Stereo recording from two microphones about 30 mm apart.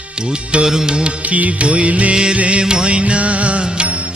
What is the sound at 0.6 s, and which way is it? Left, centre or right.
Music, centre.